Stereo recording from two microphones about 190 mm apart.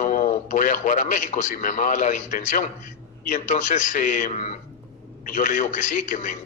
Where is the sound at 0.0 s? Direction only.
45° left (ahead or behind).